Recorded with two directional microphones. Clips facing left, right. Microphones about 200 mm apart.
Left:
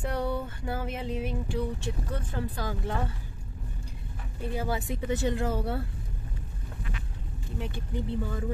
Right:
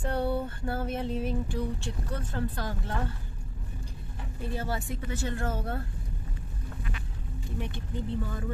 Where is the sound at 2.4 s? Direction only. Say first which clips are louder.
Right 2 dB; 15° left (ahead or behind).